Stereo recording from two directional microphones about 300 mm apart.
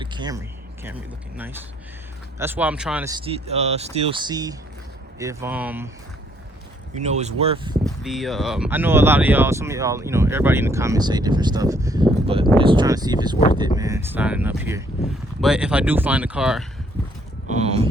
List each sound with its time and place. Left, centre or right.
0.0 s speech: centre
2.4 s speech: centre
7.0 s speech: right
8.0 s speech: centre
17.5 s speech: right